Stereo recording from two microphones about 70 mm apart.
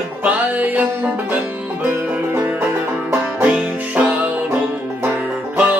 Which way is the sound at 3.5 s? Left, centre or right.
Centre.